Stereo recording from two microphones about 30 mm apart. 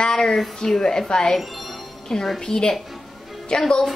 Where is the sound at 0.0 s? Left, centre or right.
Centre.